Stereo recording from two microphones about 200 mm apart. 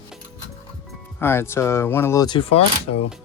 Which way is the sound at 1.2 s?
10° left (ahead or behind).